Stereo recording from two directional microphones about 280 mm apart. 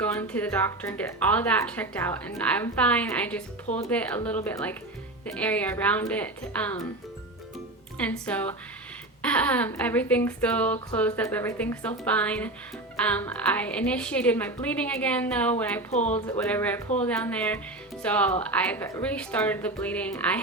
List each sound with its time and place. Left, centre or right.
0.0 s speech: centre
7.9 s speech: centre
15.9 s speech: left
16.2 s speech: centre